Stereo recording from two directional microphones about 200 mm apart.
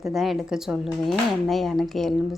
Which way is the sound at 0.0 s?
Centre (ahead or behind).